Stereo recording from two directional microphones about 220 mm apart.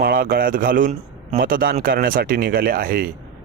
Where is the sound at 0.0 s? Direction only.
45° right (ahead or behind).